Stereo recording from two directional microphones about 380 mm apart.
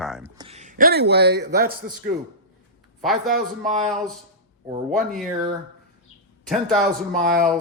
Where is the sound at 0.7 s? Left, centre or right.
Right.